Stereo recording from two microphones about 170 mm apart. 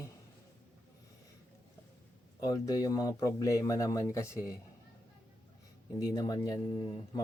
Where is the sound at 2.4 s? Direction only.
20° left (ahead or behind).